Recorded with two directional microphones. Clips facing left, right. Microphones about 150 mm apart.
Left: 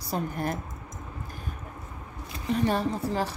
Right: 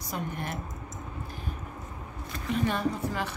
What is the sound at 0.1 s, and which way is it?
Speech, 40° left (ahead or behind).